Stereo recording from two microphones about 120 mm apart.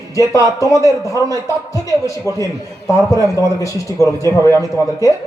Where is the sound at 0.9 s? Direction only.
25° left (ahead or behind).